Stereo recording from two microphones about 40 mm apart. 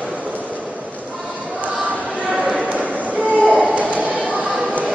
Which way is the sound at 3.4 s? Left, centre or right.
Right.